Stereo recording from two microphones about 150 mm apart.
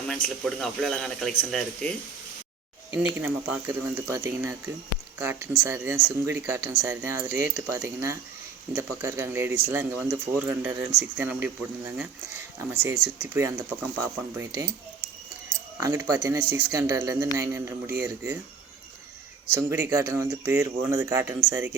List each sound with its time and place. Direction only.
0.1 s speech: centre (ahead or behind)
2.9 s speech: 10° right (ahead or behind)
12.7 s speech: 10° right (ahead or behind)
19.5 s speech: 15° right (ahead or behind)